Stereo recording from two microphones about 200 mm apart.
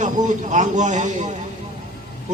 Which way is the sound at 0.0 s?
35° right (ahead or behind).